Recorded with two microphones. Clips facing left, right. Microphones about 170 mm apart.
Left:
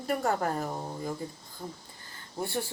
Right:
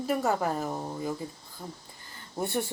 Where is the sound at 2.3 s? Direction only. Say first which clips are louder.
Right 3 dB; 20° right (ahead or behind).